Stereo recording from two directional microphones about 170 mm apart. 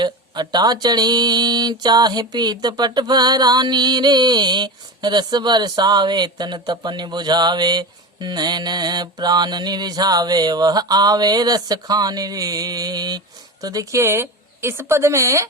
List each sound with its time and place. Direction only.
0.0 s speech: 25° right (ahead or behind)